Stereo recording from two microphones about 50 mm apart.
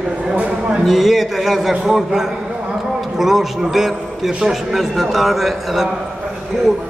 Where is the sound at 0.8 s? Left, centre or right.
Centre.